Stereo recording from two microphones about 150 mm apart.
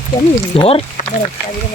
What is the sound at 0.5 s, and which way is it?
Speech, 40° left (ahead or behind).